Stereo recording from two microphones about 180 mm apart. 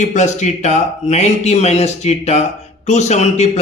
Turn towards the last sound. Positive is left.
turn(degrees=40)  # may be behind; listen again after turning